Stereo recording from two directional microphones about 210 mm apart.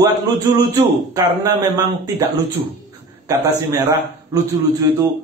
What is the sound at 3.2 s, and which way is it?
Speech, 15° right (ahead or behind).